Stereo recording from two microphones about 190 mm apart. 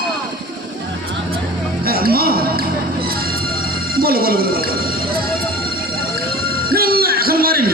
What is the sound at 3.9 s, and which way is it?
Music, 50° right (ahead or behind).